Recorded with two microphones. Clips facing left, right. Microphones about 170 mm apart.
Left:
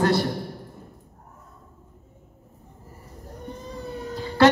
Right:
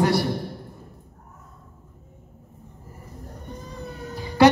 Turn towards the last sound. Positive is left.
turn(degrees=-15)  # may be behind; listen again after turning